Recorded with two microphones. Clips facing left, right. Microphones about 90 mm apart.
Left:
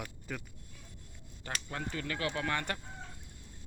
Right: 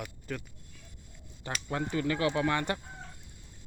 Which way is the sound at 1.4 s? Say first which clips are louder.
Right 5 dB; 20° right (ahead or behind).